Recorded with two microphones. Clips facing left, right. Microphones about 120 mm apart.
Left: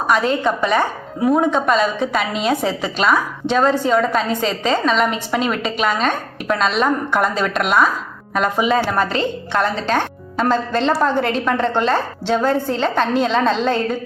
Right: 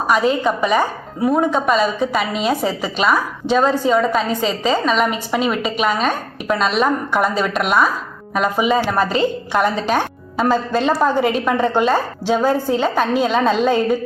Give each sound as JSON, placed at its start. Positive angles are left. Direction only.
{"t": 0.1, "sound": "a woman's voice", "side_deg": -5}